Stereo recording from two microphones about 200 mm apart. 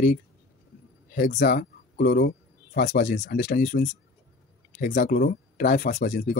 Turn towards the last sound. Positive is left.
turn(degrees=45)  # may be behind; listen again after turning